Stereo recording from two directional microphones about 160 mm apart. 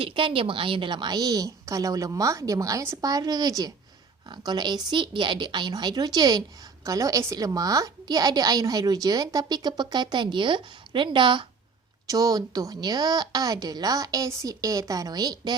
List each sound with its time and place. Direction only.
0.0 s a woman's voice: 35° right (ahead or behind)